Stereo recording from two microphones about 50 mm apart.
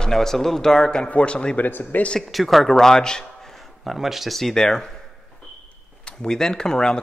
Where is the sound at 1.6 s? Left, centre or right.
Left.